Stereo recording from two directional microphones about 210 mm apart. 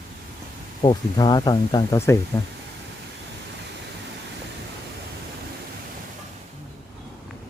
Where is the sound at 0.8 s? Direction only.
20° left (ahead or behind).